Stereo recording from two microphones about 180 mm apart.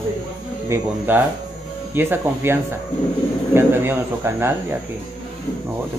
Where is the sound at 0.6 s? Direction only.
10° right (ahead or behind).